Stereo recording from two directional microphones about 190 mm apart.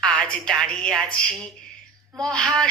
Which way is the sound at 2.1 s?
20° right (ahead or behind).